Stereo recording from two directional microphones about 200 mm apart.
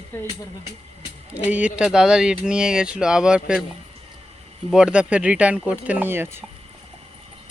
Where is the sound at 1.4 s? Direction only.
5° right (ahead or behind).